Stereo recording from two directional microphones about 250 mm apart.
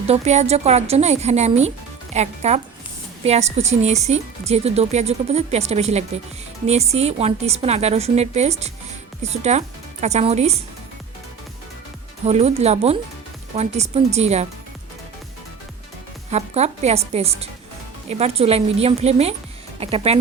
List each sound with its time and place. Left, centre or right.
0.1 s speech: right
12.2 s speech: right
16.3 s speech: right